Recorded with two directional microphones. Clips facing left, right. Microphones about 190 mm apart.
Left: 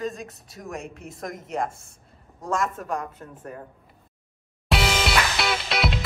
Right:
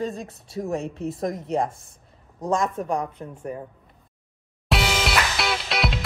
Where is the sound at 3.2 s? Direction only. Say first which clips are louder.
Right 5 dB; 15° right (ahead or behind).